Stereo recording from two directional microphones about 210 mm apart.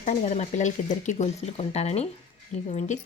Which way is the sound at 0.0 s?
35° left (ahead or behind).